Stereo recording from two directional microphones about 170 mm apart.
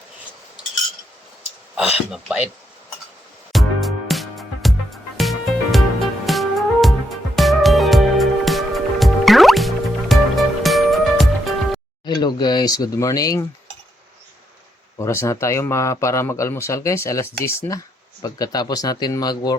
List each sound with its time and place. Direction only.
1.7 s speech: 5° right (ahead or behind)
3.5 s music: centre (ahead or behind)
12.0 s speech: 25° left (ahead or behind)
14.9 s speech: 15° left (ahead or behind)